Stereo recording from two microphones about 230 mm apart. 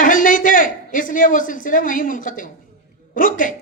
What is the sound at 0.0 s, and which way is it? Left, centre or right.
A man's voice, left.